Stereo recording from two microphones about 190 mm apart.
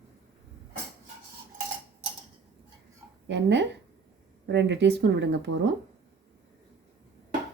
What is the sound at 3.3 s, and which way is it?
Speech, 65° right (ahead or behind).